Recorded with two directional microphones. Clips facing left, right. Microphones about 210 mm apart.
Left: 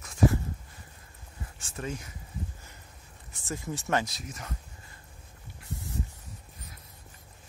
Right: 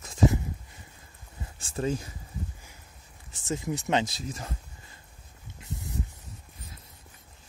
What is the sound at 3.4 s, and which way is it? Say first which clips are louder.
Speech: right 4 dB; 20° right (ahead or behind).